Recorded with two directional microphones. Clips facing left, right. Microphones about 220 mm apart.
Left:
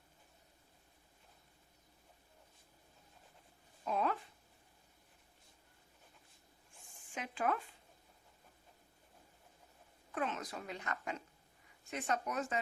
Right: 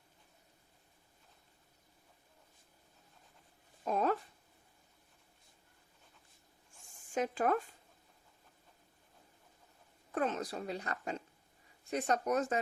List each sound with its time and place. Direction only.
3.8 s speech: 40° right (ahead or behind)
7.1 s speech: 40° right (ahead or behind)
10.2 s speech: 40° right (ahead or behind)